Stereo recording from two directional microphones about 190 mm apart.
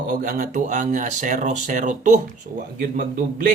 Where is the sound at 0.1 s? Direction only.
45° right (ahead or behind).